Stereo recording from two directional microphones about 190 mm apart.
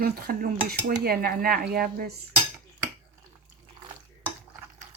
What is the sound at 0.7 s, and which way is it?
Dishes, 50° right (ahead or behind).